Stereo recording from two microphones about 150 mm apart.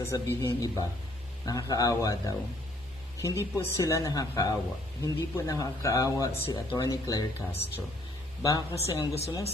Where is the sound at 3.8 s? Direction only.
20° left (ahead or behind).